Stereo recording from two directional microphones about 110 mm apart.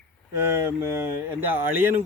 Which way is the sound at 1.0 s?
20° right (ahead or behind).